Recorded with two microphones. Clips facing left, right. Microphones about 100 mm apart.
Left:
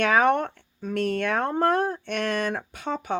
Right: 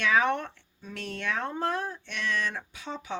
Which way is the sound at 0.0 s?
50° left (ahead or behind).